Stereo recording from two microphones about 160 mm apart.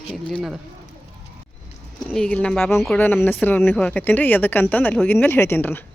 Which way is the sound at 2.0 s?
5° left (ahead or behind).